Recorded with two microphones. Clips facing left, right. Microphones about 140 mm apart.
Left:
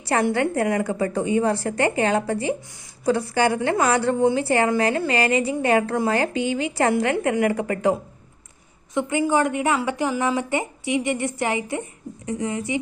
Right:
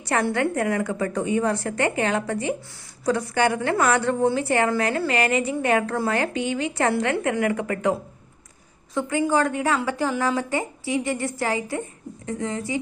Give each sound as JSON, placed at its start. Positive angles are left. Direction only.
{"t": 0.0, "sound": "a woman's voice", "side_deg": 30}
{"t": 9.0, "sound": "a woman's voice", "side_deg": 20}